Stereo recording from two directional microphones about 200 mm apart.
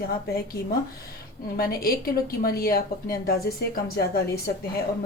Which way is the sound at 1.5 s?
50° left (ahead or behind).